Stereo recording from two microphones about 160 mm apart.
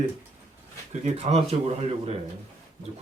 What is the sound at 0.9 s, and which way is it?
Speech, 40° right (ahead or behind).